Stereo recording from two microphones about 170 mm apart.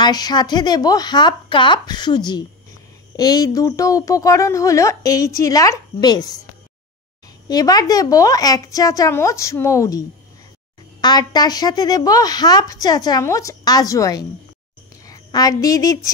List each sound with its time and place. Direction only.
0.0 s a woman's voice: 25° left (ahead or behind)
7.4 s a woman's voice: 20° left (ahead or behind)